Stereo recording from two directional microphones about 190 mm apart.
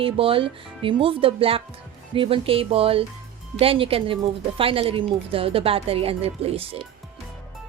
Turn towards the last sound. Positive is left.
turn(degrees=-30)  # may be behind; listen again after turning